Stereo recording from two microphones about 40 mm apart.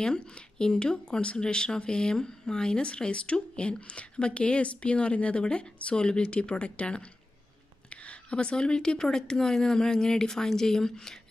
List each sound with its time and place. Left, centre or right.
0.0 s speech: left